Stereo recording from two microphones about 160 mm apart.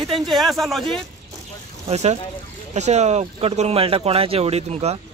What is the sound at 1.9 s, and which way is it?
A man's voice, 40° right (ahead or behind).